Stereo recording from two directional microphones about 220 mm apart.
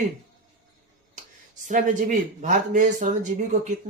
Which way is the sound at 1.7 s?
35° right (ahead or behind).